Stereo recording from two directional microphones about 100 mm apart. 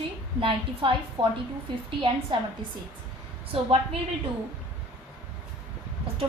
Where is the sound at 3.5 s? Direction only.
65° right (ahead or behind).